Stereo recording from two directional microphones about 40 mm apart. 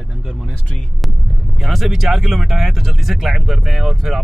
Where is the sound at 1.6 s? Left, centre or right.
Centre.